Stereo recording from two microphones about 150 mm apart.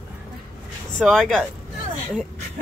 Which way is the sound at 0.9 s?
Centre (ahead or behind).